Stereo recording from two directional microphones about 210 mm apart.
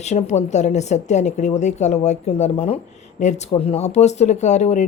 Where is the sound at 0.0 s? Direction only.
35° left (ahead or behind).